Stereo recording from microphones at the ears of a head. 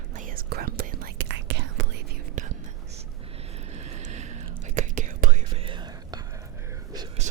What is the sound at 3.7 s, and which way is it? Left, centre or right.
Whispering, right.